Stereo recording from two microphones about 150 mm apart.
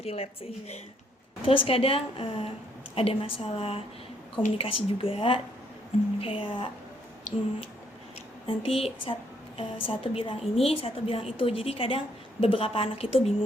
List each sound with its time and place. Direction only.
0.0 s a woman's voice: 40° left (ahead or behind)
1.5 s a woman's voice: 40° left (ahead or behind)
8.4 s a woman's voice: 40° left (ahead or behind)